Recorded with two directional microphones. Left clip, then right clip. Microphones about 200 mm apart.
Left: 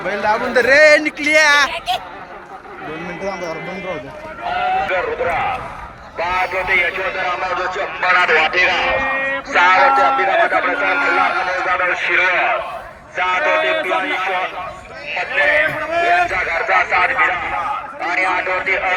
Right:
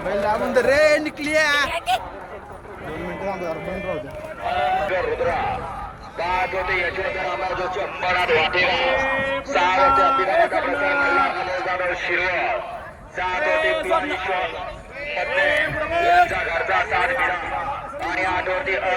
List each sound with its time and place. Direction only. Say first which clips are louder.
0.1 s a man's voice: left 3 dB; 35° left (ahead or behind)
4.9 s a man's voice: left 3 dB; 30° left (ahead or behind)